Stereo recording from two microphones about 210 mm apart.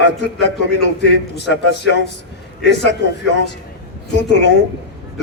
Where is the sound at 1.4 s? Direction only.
55° left (ahead or behind).